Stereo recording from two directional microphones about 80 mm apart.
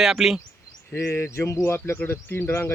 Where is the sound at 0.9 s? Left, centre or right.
Left.